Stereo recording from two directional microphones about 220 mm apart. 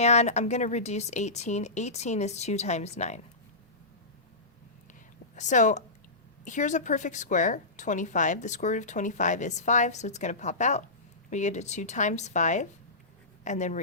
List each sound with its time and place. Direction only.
0.0 s a woman's voice: 30° left (ahead or behind)
5.3 s a woman's voice: 35° left (ahead or behind)